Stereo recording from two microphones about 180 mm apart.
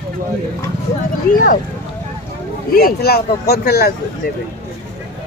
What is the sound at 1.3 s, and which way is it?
Speech, 50° left (ahead or behind).